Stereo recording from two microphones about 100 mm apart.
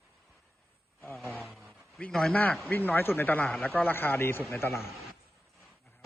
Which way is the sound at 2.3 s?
15° left (ahead or behind).